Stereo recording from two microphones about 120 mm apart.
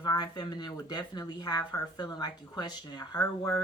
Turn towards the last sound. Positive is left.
turn(degrees=30)  # may be behind; listen again after turning